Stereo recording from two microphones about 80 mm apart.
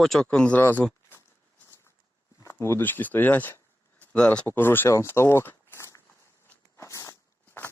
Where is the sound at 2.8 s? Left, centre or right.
Left.